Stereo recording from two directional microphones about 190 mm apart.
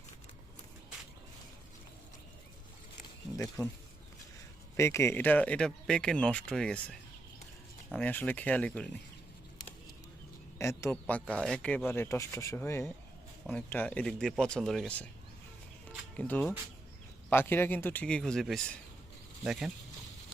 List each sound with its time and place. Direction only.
3.3 s speech: 15° left (ahead or behind)
4.8 s speech: 15° left (ahead or behind)
7.9 s speech: 10° left (ahead or behind)
10.6 s speech: 15° left (ahead or behind)
16.1 s speech: 5° left (ahead or behind)